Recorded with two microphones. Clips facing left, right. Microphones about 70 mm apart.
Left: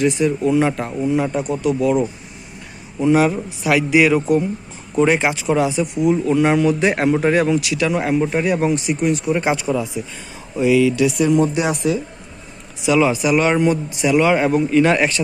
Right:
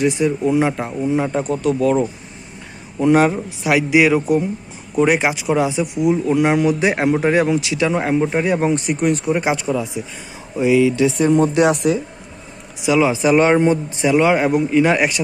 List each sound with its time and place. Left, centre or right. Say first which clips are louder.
0.0 s speech: even; centre
1.4 s speech: right 1 dB; right
3.0 s speech: right 1 dB; right
3.6 s speech: even; centre
8.7 s speech: right 1 dB; right
9.6 s speech: even; centre
10.6 s speech: even; right
11.3 s speech: right 2 dB; right
11.5 s speech: right 4 dB; right
12.8 s speech: even; centre
13.2 s speech: right 2 dB; right; by 15.2 s centre